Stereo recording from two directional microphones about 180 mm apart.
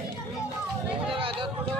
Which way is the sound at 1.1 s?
30° right (ahead or behind).